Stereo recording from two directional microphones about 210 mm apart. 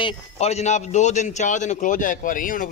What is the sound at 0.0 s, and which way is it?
A man's voice, 30° left (ahead or behind).